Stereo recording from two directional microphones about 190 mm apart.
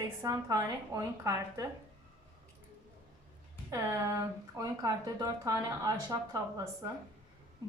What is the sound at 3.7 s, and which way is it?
A woman's voice, 15° right (ahead or behind).